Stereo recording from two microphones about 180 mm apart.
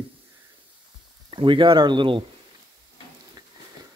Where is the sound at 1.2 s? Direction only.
30° right (ahead or behind).